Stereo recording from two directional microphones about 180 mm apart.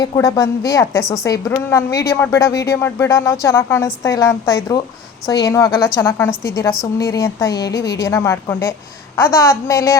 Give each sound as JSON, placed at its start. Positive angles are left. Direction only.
{"t": 0.0, "sound": "a woman's voice", "side_deg": 20}